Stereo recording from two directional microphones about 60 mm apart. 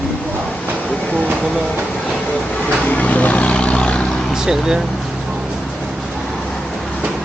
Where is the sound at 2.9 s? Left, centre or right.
Left.